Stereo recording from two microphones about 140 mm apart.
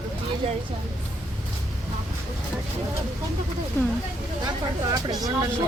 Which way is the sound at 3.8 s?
15° left (ahead or behind).